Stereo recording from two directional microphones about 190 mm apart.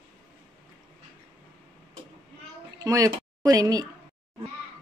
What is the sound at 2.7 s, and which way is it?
Speech, 20° right (ahead or behind).